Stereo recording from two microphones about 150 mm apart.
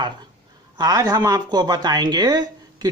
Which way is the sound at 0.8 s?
25° right (ahead or behind).